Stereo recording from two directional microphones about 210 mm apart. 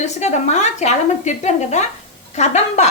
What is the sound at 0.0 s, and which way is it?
A woman's voice, 35° left (ahead or behind).